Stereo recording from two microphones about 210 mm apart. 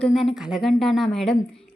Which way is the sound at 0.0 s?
Centre (ahead or behind).